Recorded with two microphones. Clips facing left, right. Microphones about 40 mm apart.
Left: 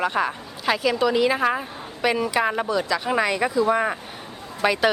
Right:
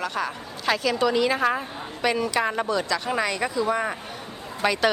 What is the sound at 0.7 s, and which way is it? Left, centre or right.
Speech, centre.